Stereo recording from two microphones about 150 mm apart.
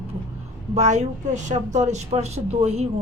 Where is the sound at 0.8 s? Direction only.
50° right (ahead or behind).